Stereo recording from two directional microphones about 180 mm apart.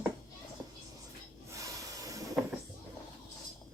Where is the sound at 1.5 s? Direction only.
20° right (ahead or behind).